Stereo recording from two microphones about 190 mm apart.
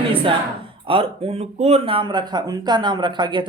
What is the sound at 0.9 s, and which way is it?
Speech, 30° right (ahead or behind).